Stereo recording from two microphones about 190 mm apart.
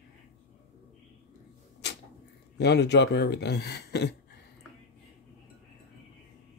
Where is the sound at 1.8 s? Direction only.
65° left (ahead or behind).